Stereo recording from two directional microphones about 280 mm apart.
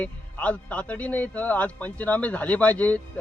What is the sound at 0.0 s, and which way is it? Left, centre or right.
Speech, centre.